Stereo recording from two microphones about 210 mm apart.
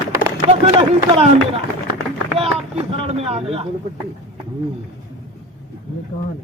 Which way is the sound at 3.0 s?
30° right (ahead or behind).